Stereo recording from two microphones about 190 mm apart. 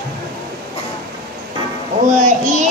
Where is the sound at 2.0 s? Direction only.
40° right (ahead or behind).